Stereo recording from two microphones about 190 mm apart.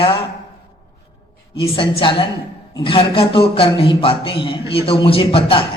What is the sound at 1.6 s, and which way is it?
A man's voice, 25° left (ahead or behind).